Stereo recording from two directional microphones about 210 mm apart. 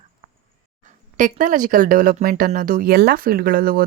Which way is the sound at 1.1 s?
40° right (ahead or behind).